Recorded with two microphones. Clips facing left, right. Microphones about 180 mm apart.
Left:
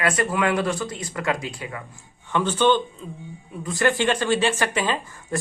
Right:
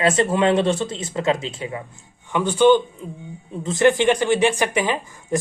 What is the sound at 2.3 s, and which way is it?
Speech, 10° right (ahead or behind).